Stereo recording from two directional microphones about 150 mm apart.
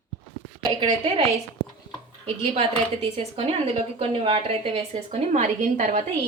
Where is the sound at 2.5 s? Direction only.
40° right (ahead or behind).